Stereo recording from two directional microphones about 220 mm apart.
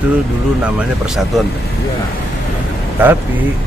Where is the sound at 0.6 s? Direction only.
Centre (ahead or behind).